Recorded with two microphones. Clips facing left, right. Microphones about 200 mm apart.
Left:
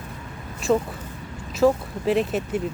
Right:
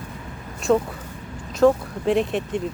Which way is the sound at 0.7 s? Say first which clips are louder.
Right 2 dB; 5° left (ahead or behind).